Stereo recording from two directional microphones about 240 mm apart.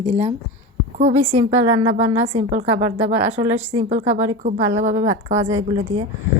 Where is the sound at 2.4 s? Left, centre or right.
Right.